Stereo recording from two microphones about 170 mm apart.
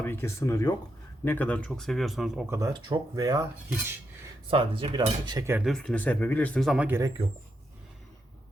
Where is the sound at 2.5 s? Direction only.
20° right (ahead or behind).